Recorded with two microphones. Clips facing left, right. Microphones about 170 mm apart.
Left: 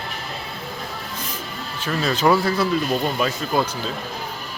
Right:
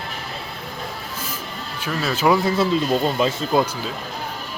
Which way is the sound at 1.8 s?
5° right (ahead or behind).